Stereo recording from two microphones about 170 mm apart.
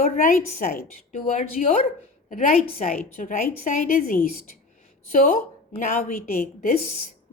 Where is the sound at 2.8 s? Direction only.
45° left (ahead or behind).